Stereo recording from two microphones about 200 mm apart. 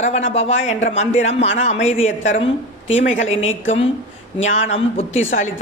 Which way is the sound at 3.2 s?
80° left.